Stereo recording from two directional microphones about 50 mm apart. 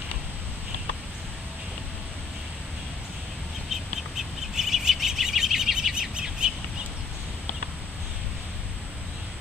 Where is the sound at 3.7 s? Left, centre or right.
Centre.